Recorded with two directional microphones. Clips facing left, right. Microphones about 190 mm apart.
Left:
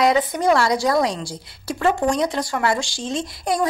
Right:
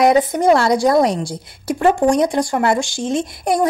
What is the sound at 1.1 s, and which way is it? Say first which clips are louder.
A woman's voice: right 6 dB; 20° right (ahead or behind).